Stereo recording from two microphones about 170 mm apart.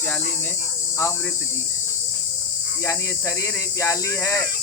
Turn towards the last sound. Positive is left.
turn(degrees=15)  # may be behind; listen again after turning